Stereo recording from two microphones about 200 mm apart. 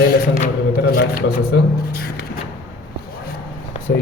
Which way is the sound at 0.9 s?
50° left (ahead or behind).